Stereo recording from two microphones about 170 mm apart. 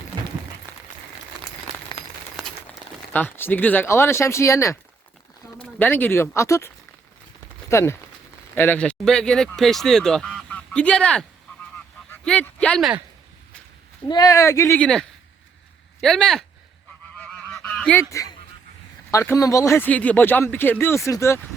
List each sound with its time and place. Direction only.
2.4 s a sound: centre (ahead or behind)
3.1 s speech: 10° left (ahead or behind)
7.7 s speech: 15° left (ahead or behind)
14.1 s speech: 20° left (ahead or behind); by 16.4 s 5° left (ahead or behind)
17.2 s goose: 10° left (ahead or behind)
18.1 s speech: 20° left (ahead or behind)